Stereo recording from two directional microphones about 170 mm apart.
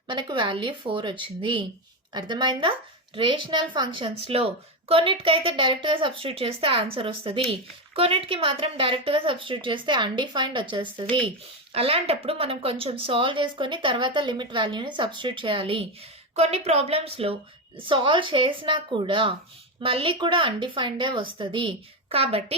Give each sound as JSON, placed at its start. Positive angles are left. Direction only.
{"t": 0.1, "sound": "a woman's voice", "side_deg": -25}